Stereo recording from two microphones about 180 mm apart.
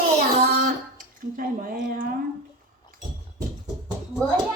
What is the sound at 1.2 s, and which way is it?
Speech, 55° right (ahead or behind).